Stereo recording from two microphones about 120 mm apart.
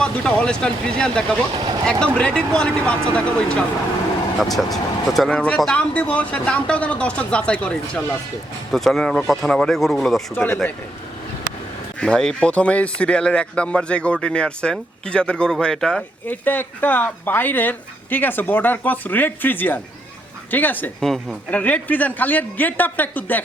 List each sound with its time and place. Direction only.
0.0 s speech: 10° left (ahead or behind)
1.5 s vehicle: 35° right (ahead or behind)
1.8 s speech: 5° left (ahead or behind)
10.3 s speech: 15° left (ahead or behind)
11.9 s speech: 5° left (ahead or behind)
16.2 s speech: 15° left (ahead or behind)
21.0 s speech: 5° left (ahead or behind)
21.6 s speech: 15° left (ahead or behind)